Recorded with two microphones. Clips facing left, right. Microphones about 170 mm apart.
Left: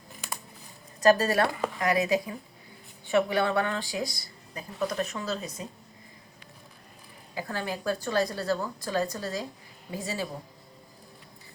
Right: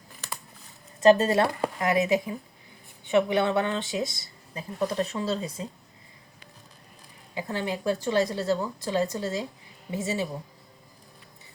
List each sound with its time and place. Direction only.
1.0 s speech: 25° right (ahead or behind)
7.3 s speech: 20° right (ahead or behind)